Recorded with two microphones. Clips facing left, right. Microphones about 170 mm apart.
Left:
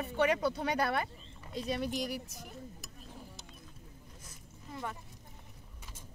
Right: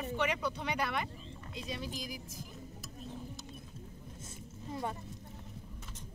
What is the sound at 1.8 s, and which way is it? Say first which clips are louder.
Speech: left 7 dB; 70° left (ahead or behind).